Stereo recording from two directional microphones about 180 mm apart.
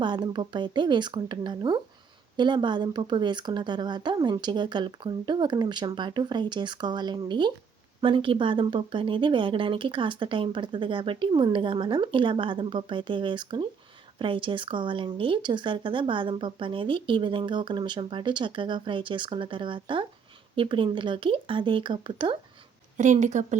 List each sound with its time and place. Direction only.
0.0 s speech: 25° right (ahead or behind)
23.0 s speech: 40° right (ahead or behind)